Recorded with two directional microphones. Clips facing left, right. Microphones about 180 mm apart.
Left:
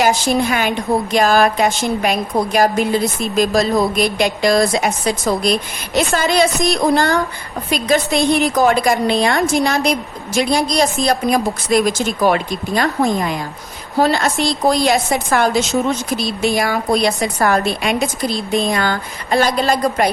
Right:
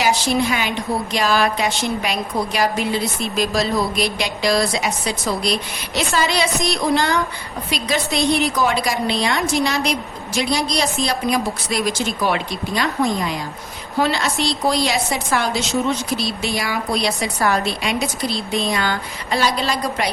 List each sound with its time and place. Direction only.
0.0 s a woman's voice: 50° left (ahead or behind)